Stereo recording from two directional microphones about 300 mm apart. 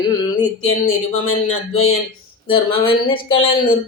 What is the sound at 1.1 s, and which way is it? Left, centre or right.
Speech, left.